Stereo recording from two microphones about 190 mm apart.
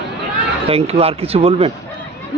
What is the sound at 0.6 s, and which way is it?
Speech, 30° right (ahead or behind).